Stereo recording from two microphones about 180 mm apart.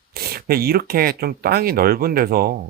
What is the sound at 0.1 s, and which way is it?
Speech, 60° right (ahead or behind).